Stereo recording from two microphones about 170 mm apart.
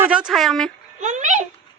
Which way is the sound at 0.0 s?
5° right (ahead or behind).